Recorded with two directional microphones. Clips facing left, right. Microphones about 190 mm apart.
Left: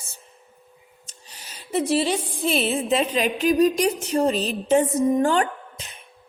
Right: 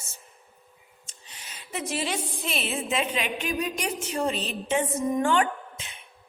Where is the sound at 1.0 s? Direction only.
40° left (ahead or behind).